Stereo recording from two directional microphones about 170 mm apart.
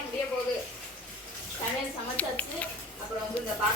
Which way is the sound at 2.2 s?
10° left (ahead or behind).